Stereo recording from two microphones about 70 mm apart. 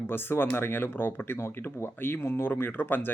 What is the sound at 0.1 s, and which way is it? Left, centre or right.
Speech, left.